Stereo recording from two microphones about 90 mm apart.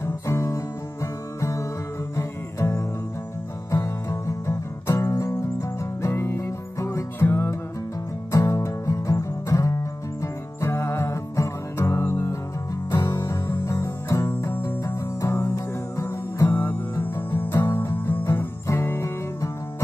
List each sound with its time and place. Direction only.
0.0 s guitar: 30° left (ahead or behind)
1.4 s music: 35° left (ahead or behind)
8.3 s guitar: 35° left (ahead or behind)
10.2 s music: 35° left (ahead or behind)